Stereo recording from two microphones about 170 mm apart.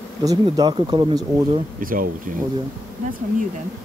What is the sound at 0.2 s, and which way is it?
Speech, 20° right (ahead or behind).